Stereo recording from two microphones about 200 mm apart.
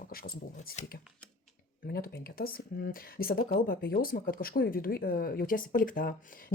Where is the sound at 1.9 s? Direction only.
50° left (ahead or behind).